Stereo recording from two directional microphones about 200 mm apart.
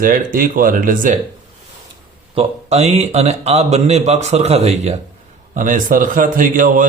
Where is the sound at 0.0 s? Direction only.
45° right (ahead or behind).